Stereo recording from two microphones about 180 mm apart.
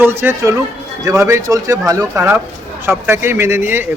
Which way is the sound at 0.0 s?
10° right (ahead or behind).